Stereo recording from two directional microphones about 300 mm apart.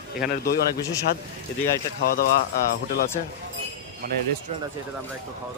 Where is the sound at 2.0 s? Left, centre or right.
Left.